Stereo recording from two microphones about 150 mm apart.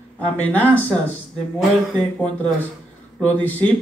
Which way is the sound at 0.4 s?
10° left (ahead or behind).